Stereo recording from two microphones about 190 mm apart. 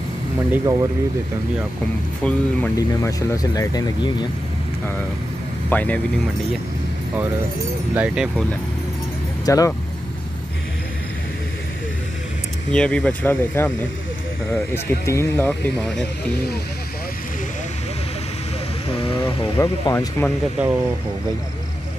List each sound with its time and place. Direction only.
0.5 s speech: 15° right (ahead or behind)
2.2 s speech: 5° left (ahead or behind)
3.1 s speech: 20° left (ahead or behind)
5.7 s speech: 10° left (ahead or behind)
7.9 s speech: 5° right (ahead or behind)
9.5 s speech: 15° left (ahead or behind)
12.7 s speech: 5° left (ahead or behind)
19.4 s speech: 15° left (ahead or behind)